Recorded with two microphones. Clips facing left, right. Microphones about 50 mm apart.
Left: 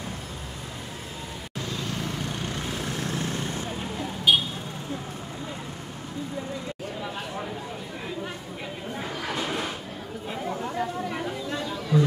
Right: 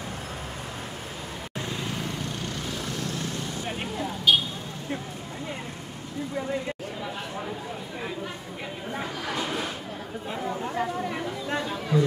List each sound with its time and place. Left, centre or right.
2.4 s vehicle: left
4.3 s vehicle: centre
9.3 s a sound: centre
10.6 s chatter: centre
11.4 s chatter: right